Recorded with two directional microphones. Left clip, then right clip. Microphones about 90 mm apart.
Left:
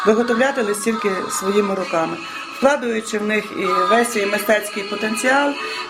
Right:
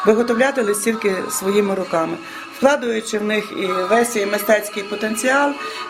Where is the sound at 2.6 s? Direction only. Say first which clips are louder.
Right 1 dB; 20° right (ahead or behind).